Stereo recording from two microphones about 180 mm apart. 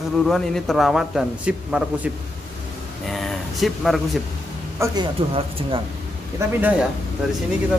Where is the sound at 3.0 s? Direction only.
Centre (ahead or behind).